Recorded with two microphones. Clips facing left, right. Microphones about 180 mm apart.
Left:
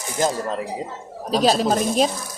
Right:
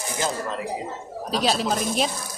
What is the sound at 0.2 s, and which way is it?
Speech, 40° left (ahead or behind).